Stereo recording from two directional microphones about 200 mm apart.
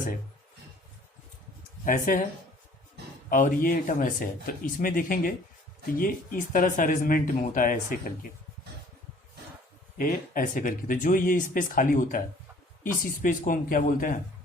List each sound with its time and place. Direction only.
1.8 s speech: 40° left (ahead or behind)
3.2 s speech: 45° left (ahead or behind)
10.0 s speech: 45° left (ahead or behind)